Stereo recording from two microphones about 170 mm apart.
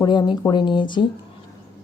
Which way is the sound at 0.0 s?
25° left (ahead or behind).